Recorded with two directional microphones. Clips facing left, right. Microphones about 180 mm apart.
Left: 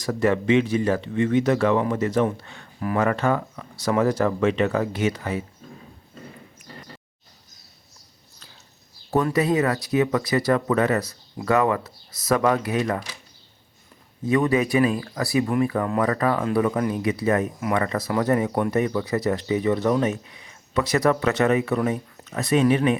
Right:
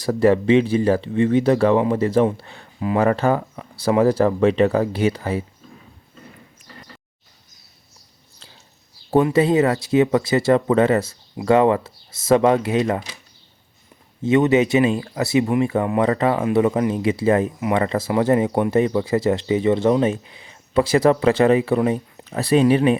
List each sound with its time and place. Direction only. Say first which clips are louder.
0.0 s speech: right 5 dB; 30° right (ahead or behind)
9.3 s speech: right 5 dB; 25° right (ahead or behind)
14.2 s speech: right 5 dB; 25° right (ahead or behind)